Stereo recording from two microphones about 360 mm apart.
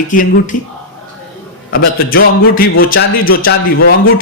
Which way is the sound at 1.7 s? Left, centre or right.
Left.